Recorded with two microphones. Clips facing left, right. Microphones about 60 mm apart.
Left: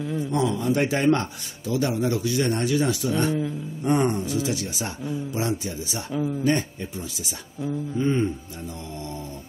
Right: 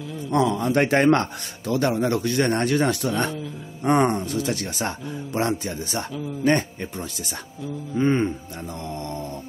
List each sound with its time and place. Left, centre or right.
0.3 s a man's voice: right
8.0 s a man's voice: right